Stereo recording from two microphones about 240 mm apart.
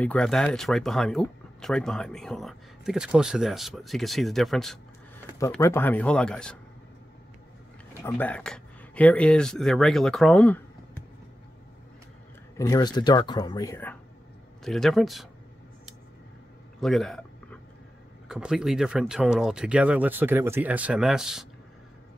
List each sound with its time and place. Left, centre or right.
0.0 s speech: centre
7.9 s speech: centre
12.5 s speech: centre
16.8 s a sound: centre
18.3 s speech: centre